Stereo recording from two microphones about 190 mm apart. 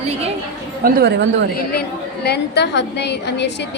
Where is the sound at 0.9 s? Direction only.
60° right (ahead or behind).